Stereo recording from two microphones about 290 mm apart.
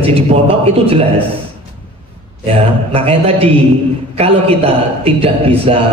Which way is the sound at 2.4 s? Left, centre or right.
Centre.